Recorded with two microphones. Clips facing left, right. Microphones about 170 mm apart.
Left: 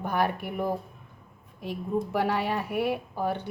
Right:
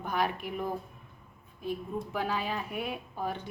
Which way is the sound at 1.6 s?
75° left (ahead or behind).